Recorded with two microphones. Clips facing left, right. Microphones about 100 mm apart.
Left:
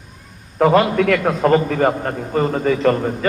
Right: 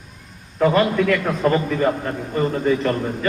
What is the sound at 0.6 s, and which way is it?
A man's voice, 90° left.